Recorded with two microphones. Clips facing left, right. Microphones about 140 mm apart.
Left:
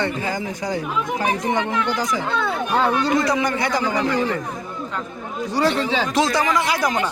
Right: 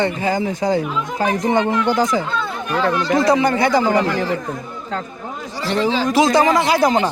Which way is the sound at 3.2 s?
30° right (ahead or behind).